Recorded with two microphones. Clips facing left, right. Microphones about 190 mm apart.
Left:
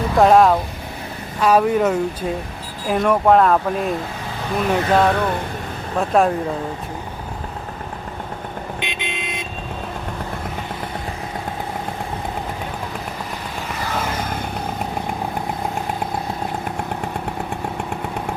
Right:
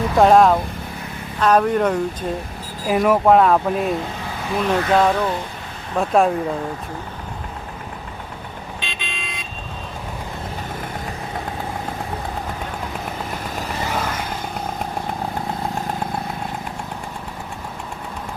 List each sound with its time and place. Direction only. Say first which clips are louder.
0.2 s speech: even; centre (ahead or behind)
8.8 s vehicle: left 5 dB; 20° left (ahead or behind)